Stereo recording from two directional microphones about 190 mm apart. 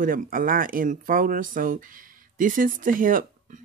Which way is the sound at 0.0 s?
45° right (ahead or behind).